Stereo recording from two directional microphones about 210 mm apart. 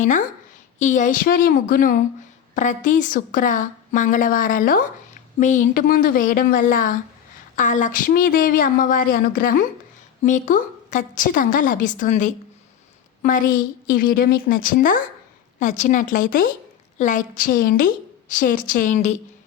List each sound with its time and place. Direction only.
0.8 s a woman's voice: 35° left (ahead or behind)